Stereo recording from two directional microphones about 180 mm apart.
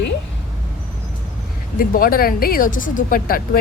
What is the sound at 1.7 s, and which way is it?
Speech, 55° left (ahead or behind).